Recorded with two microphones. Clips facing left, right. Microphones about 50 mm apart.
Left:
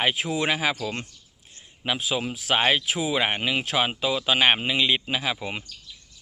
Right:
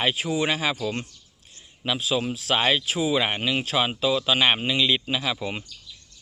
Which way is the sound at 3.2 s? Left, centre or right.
Left.